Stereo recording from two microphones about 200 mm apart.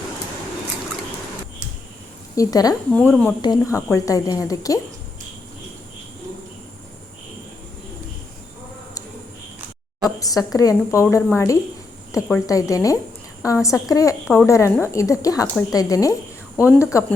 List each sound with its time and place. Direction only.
2.3 s a woman's voice: 15° left (ahead or behind)
10.2 s a woman's voice: 15° left (ahead or behind)